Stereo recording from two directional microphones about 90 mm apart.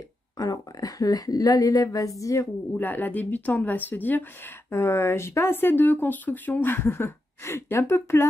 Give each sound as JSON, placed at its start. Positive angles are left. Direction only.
{"t": 0.4, "sound": "a woman's voice", "side_deg": 45}
{"t": 2.8, "sound": "speech", "side_deg": 20}